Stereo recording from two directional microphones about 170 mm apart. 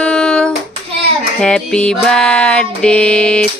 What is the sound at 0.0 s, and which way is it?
Hands, 5° left (ahead or behind).